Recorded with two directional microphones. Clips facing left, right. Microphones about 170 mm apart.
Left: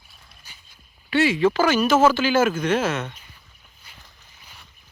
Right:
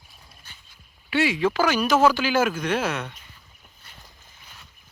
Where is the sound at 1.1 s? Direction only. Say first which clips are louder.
Left 3 dB; centre (ahead or behind).